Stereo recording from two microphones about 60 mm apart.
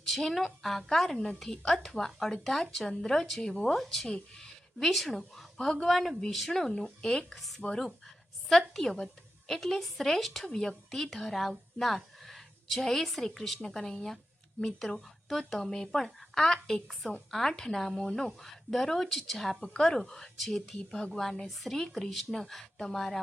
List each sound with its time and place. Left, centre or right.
0.0 s a woman's voice: centre